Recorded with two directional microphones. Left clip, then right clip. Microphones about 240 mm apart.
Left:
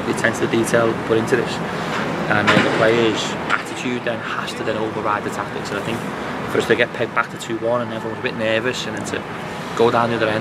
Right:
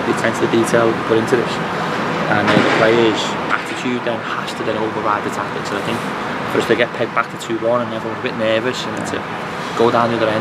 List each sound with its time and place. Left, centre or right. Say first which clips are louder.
0.1 s speech: right 1 dB; centre
4.6 s speech: right 3 dB; centre
6.5 s speech: right 1 dB; centre
8.4 s speech: right 3 dB; centre
9.8 s speech: right 2 dB; centre